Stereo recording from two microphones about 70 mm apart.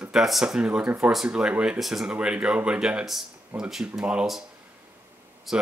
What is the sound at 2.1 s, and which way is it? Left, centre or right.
Speech, centre.